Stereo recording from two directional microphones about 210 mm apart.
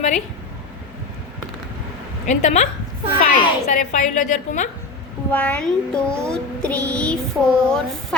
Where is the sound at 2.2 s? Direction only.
35° left (ahead or behind).